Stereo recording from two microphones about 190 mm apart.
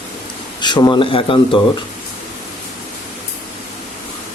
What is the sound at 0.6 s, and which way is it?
Speech, 25° left (ahead or behind).